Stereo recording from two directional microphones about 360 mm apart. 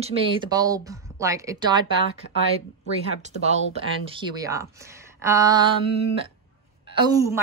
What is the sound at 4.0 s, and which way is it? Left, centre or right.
A woman's voice, centre.